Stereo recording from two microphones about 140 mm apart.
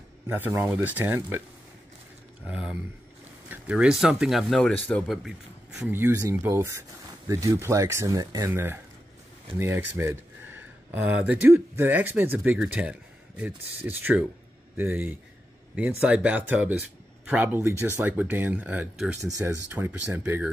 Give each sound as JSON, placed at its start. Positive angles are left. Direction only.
{"t": 0.3, "sound": "speech", "side_deg": -15}
{"t": 2.4, "sound": "speech", "side_deg": -10}
{"t": 4.6, "sound": "speech", "side_deg": 10}
{"t": 5.1, "sound": "speech", "side_deg": -5}
{"t": 5.9, "sound": "speech", "side_deg": -15}